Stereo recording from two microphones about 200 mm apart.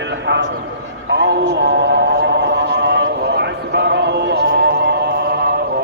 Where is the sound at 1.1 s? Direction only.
60° right (ahead or behind).